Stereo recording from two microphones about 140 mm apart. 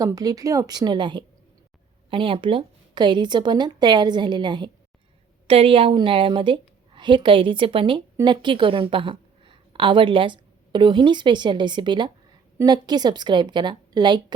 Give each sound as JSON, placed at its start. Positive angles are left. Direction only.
{"t": 0.0, "sound": "a woman's voice", "side_deg": -25}